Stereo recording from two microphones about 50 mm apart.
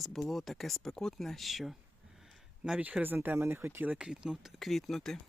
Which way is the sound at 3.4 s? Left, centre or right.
Right.